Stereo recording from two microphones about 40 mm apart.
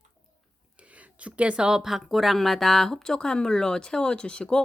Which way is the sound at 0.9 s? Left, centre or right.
Right.